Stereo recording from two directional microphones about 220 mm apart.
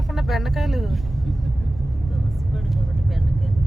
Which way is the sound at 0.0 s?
Centre (ahead or behind).